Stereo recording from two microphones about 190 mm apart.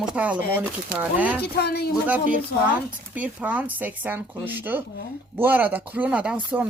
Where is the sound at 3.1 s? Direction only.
10° right (ahead or behind).